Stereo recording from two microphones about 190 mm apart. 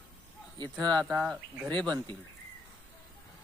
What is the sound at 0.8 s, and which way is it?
Speech, 5° left (ahead or behind).